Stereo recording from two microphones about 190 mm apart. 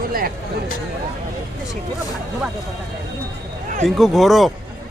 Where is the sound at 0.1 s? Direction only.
50° right (ahead or behind).